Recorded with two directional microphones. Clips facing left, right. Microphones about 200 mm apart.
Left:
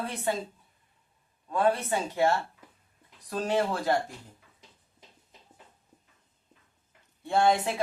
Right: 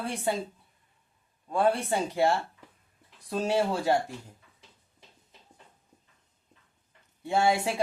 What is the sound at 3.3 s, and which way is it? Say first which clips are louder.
Speech: right 1 dB; 10° right (ahead or behind).